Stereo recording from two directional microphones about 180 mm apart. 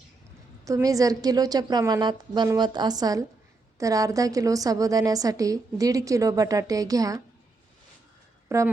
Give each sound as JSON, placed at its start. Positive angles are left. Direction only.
{"t": 0.6, "sound": "a woman's voice", "side_deg": -20}
{"t": 8.4, "sound": "speech", "side_deg": -15}